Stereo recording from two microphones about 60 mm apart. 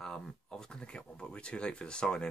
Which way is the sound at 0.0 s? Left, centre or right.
Centre.